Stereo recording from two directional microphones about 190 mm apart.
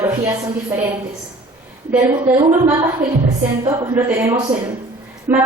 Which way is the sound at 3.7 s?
15° right (ahead or behind).